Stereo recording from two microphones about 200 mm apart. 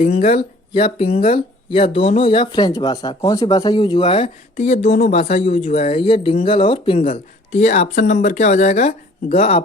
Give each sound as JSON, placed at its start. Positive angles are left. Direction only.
{"t": 0.0, "sound": "speech", "side_deg": 35}